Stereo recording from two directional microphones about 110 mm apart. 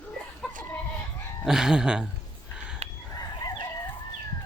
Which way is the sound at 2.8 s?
75° right (ahead or behind).